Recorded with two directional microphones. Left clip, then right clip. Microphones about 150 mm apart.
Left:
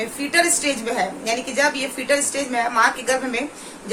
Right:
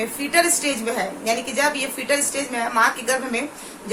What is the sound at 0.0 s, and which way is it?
A woman's voice, 10° left (ahead or behind).